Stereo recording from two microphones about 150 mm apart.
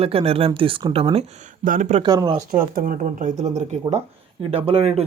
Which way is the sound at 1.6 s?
60° right (ahead or behind).